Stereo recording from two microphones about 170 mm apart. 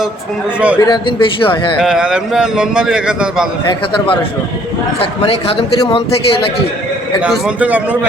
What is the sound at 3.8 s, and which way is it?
A man's voice, 30° left (ahead or behind).